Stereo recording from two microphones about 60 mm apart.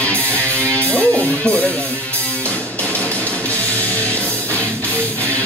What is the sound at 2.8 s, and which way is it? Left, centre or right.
Music, left.